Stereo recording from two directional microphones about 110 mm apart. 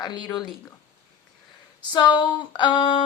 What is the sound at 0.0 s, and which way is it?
Speech, 40° left (ahead or behind).